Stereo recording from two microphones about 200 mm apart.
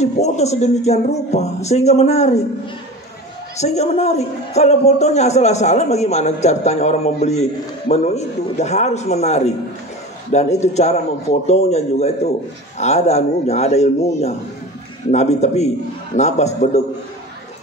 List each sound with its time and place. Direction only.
0.0 s a man's voice: 35° left (ahead or behind)
3.5 s a man's voice: 35° left (ahead or behind)